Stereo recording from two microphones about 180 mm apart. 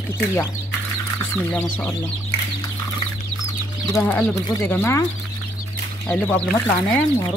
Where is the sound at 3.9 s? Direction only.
5° left (ahead or behind).